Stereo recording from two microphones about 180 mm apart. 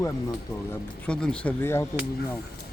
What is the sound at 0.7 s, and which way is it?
Speech, 5° left (ahead or behind).